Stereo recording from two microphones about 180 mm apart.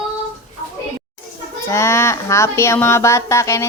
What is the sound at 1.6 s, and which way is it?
A woman's voice, 15° left (ahead or behind).